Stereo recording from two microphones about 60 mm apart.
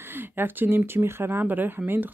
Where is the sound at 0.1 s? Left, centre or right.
Right.